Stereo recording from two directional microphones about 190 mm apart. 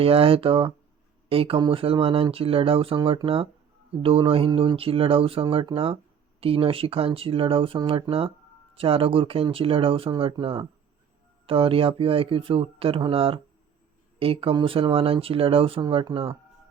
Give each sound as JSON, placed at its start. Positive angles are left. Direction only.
{"t": 0.0, "sound": "speech", "side_deg": -30}